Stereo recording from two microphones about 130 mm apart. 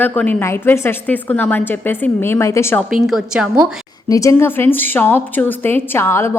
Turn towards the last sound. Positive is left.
turn(degrees=20)  # may be behind; listen again after turning